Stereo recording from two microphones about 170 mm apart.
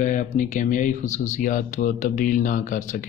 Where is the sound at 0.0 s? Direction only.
50° left (ahead or behind).